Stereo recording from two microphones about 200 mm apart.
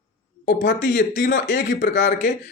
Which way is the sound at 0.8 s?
40° left (ahead or behind).